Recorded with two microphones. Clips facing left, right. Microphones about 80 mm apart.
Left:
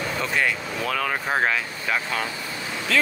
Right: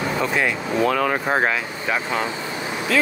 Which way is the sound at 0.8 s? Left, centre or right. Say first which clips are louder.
Right 4 dB; centre.